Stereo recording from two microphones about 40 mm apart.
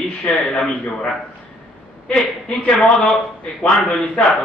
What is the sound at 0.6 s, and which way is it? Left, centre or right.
Speech, left.